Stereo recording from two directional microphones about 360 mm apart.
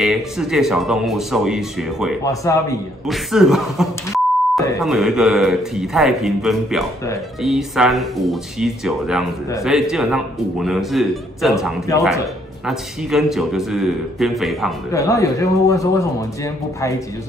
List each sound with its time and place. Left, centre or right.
0.0 s speech: centre